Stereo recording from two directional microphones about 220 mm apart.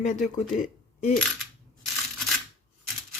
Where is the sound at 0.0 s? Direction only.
35° left (ahead or behind).